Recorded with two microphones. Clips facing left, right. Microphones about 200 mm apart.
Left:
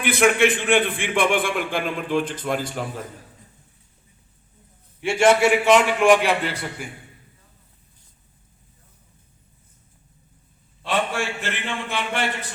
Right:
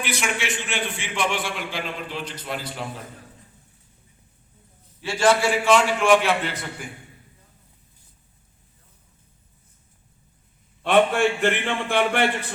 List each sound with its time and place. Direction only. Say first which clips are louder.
0.0 s a man's voice: left 10 dB; 55° left (ahead or behind)
4.9 s a man's voice: left 3 dB; 25° left (ahead or behind)
10.8 s a man's voice: right 6 dB; 60° right (ahead or behind)